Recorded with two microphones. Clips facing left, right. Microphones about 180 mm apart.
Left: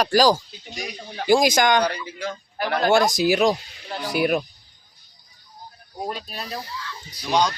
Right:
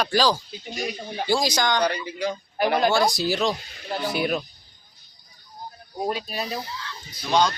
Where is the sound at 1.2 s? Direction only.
15° left (ahead or behind).